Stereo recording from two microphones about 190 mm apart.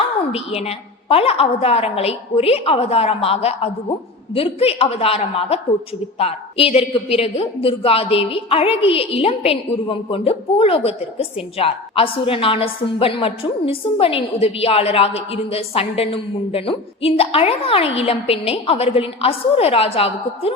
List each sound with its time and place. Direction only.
0.3 s a woman's voice: 30° left (ahead or behind)